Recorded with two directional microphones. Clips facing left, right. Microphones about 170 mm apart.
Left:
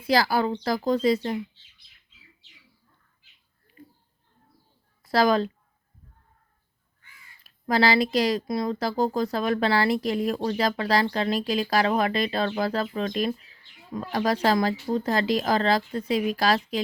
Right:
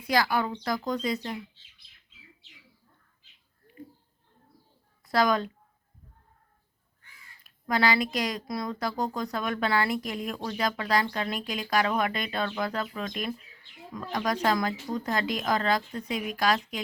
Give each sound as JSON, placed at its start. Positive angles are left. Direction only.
{"t": 0.1, "sound": "speech", "side_deg": 35}
{"t": 5.0, "sound": "a woman's voice", "side_deg": 30}
{"t": 7.4, "sound": "speech", "side_deg": 30}